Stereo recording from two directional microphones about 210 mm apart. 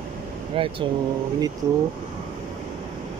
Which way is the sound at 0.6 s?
25° right (ahead or behind).